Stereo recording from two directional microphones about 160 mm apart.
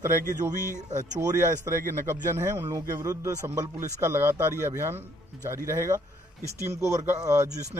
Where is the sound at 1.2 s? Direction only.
15° right (ahead or behind).